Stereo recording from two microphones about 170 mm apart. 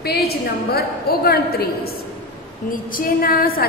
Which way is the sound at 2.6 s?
55° left (ahead or behind).